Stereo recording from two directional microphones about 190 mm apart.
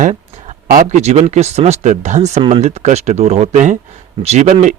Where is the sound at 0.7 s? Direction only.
40° right (ahead or behind).